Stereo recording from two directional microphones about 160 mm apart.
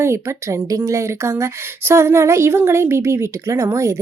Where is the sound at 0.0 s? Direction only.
15° right (ahead or behind).